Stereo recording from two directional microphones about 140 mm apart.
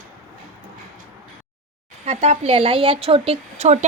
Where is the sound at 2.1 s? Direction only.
50° right (ahead or behind).